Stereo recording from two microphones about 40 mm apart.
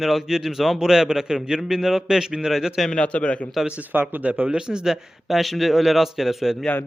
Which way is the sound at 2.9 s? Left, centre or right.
Left.